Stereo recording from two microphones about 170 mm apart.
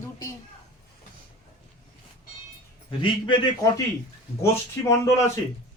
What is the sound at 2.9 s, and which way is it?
Speech, 30° left (ahead or behind).